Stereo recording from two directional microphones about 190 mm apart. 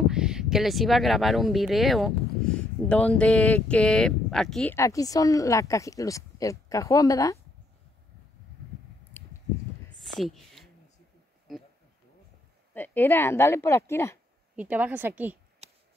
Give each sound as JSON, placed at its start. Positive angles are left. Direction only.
{"t": 0.1, "sound": "speech", "side_deg": -5}
{"t": 4.7, "sound": "speech", "side_deg": 15}
{"t": 9.1, "sound": "a sound", "side_deg": 10}
{"t": 10.2, "sound": "a sound", "side_deg": 0}
{"t": 12.7, "sound": "speech", "side_deg": 10}
{"t": 14.5, "sound": "a woman's voice", "side_deg": -10}